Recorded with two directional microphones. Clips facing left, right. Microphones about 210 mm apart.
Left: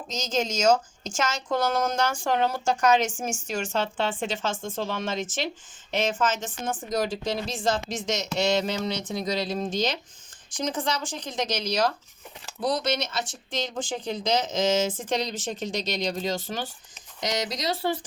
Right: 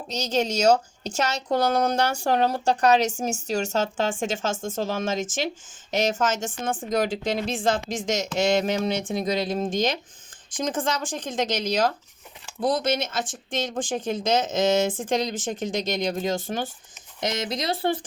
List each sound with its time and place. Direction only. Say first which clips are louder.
0.1 s speech: right 3 dB; 35° right (ahead or behind); by 17.9 s 55° right (ahead or behind)